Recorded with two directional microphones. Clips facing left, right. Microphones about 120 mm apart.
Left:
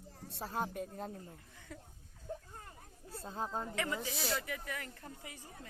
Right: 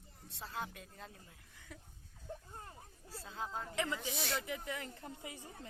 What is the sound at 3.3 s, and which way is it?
Speech, 40° left (ahead or behind).